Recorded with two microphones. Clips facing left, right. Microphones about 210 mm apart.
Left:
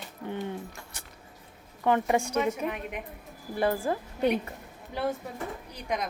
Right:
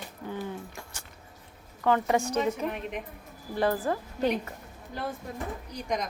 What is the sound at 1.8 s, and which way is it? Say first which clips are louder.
Speech: even; 20° left (ahead or behind).